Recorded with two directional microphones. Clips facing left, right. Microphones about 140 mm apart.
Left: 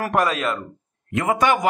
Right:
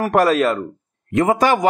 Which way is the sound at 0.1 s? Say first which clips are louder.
Right 7 dB; 40° right (ahead or behind).